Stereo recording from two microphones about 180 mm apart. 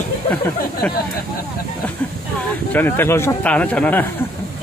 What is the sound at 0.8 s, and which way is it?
Speech, 5° left (ahead or behind).